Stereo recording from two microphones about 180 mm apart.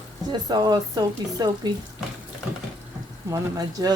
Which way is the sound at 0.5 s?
20° right (ahead or behind).